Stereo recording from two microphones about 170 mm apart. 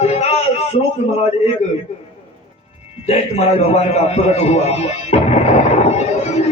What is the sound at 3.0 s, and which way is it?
A man's voice, 40° left (ahead or behind).